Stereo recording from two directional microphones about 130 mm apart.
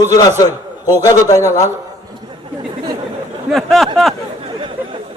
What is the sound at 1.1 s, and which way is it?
Speech, 25° left (ahead or behind).